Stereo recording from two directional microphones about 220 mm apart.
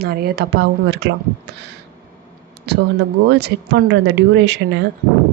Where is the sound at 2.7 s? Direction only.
50° right (ahead or behind).